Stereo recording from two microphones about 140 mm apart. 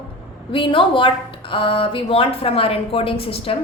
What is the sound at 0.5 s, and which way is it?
A woman's voice, 40° left (ahead or behind).